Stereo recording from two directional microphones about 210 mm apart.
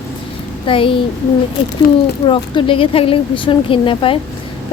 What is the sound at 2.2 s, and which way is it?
Speech, 25° left (ahead or behind).